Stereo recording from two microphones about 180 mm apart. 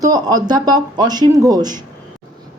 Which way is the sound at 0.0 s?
20° right (ahead or behind).